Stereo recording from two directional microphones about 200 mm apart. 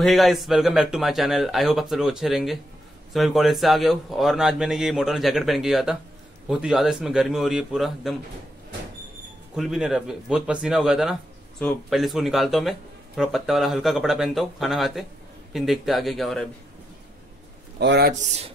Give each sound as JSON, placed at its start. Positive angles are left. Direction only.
{"t": 0.0, "sound": "speech", "side_deg": 0}
{"t": 9.6, "sound": "speech", "side_deg": 0}
{"t": 17.7, "sound": "speech", "side_deg": -55}